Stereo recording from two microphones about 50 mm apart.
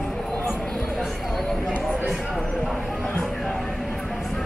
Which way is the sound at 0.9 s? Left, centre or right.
Centre.